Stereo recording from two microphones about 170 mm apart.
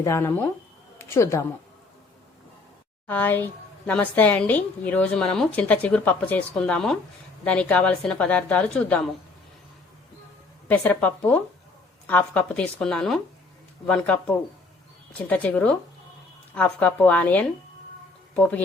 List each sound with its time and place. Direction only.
0.0 s a woman's voice: 15° left (ahead or behind)
3.1 s a woman's voice: 10° left (ahead or behind)
10.7 s a woman's voice: 10° left (ahead or behind)